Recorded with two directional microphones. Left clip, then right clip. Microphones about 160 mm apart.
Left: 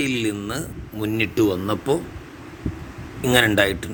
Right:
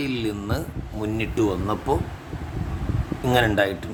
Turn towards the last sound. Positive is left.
turn(degrees=20)  # may be behind; listen again after turning